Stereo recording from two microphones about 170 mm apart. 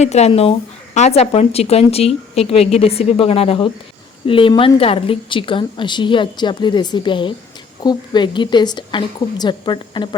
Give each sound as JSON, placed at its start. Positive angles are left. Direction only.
{"t": 0.0, "sound": "speech", "side_deg": 40}